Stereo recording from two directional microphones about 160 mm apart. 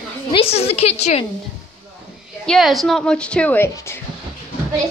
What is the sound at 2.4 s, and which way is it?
A child's voice, centre (ahead or behind).